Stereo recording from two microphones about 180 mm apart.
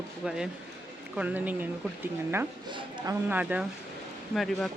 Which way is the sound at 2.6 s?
25° right (ahead or behind).